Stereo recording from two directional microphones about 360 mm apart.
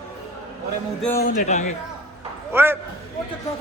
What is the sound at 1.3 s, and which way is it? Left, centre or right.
Speech, centre.